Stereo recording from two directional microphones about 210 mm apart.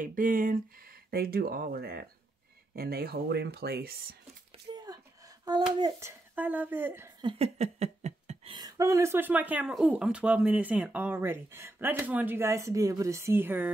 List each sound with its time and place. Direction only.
0.0 s speech: 40° right (ahead or behind)
4.7 s speech: 20° right (ahead or behind)
7.2 s a sound: 25° right (ahead or behind)
8.5 s speech: 15° right (ahead or behind)